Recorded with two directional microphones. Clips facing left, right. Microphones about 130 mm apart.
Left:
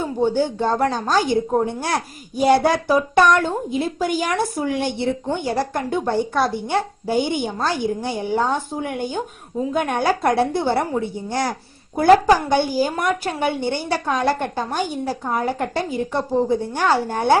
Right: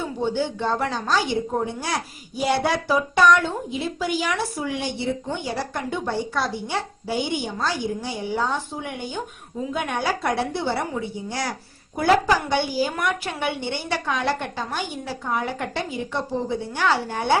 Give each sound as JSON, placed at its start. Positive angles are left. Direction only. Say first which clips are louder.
{"t": 0.0, "sound": "a woman's voice", "louder": "left 5 dB", "side_deg": 45}